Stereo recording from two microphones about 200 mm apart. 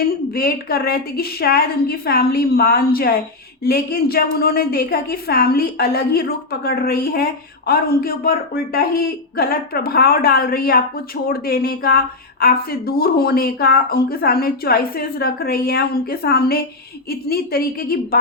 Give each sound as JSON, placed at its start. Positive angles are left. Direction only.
{"t": 0.3, "sound": "speech", "side_deg": 50}